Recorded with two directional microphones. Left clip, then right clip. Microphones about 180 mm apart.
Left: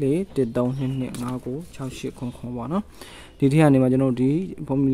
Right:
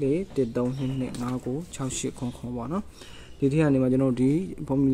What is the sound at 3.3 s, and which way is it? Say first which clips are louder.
Speech: left 5 dB; 35° left (ahead or behind).